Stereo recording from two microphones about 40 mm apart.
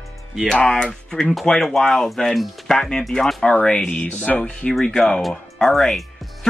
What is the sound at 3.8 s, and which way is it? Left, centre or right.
Speech, left.